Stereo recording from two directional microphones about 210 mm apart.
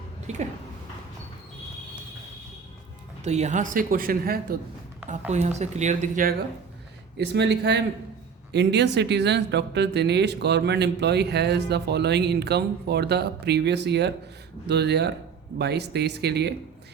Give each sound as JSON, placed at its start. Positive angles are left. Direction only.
{"t": 0.3, "sound": "speech", "side_deg": -30}
{"t": 3.2, "sound": "speech", "side_deg": -30}
{"t": 5.3, "sound": "speech", "side_deg": -30}
{"t": 7.2, "sound": "speech", "side_deg": -55}